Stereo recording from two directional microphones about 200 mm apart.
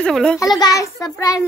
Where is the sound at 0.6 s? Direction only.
15° left (ahead or behind).